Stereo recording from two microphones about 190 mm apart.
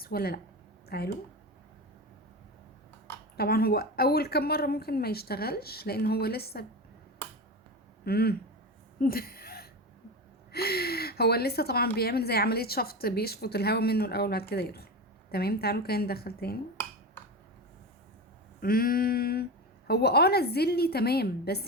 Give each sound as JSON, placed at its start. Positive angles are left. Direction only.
{"t": 0.0, "sound": "a woman's voice", "side_deg": 55}
{"t": 3.3, "sound": "a woman's voice", "side_deg": 55}
{"t": 8.0, "sound": "a woman's voice", "side_deg": 55}
{"t": 9.0, "sound": "a sound", "side_deg": 50}
{"t": 10.5, "sound": "a woman's voice", "side_deg": 55}
{"t": 18.6, "sound": "a sound", "side_deg": 50}
{"t": 19.9, "sound": "a woman's voice", "side_deg": 60}